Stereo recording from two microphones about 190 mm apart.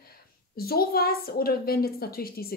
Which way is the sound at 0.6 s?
55° left (ahead or behind).